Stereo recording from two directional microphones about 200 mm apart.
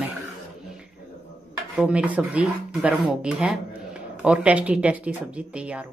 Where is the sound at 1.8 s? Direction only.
5° right (ahead or behind).